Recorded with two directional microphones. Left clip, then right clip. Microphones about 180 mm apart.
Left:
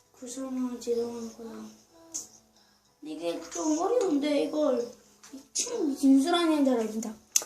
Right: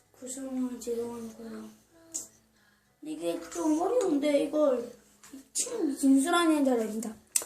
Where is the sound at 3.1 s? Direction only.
5° left (ahead or behind).